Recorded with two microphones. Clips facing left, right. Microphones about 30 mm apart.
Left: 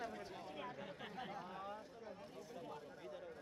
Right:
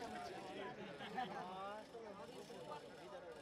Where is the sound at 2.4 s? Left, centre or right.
Right.